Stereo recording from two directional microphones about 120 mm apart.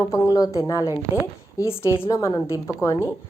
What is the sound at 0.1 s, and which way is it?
A woman's voice, 30° left (ahead or behind).